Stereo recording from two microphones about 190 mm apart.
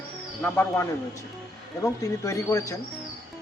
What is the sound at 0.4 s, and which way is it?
Speech, 10° left (ahead or behind).